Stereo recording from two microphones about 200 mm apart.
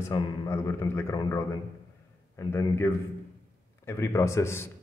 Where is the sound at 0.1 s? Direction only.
15° left (ahead or behind).